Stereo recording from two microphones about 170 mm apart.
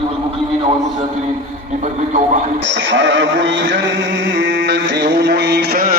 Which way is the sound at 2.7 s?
90° right.